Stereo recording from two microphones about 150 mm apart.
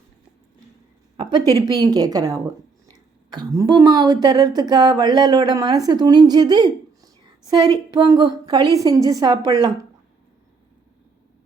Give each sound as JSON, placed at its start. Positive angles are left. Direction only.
{"t": 1.1, "sound": "a woman's voice", "side_deg": -30}